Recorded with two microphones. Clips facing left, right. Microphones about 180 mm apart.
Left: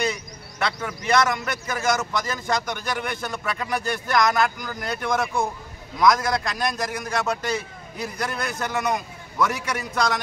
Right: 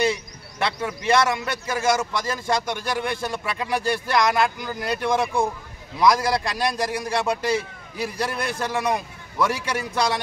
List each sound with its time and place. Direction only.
0.0 s a man's voice: 30° right (ahead or behind)